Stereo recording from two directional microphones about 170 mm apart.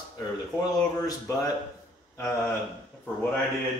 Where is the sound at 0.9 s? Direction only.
20° left (ahead or behind).